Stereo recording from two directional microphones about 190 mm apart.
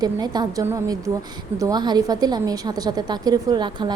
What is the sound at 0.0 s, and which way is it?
A woman's voice, 20° right (ahead or behind).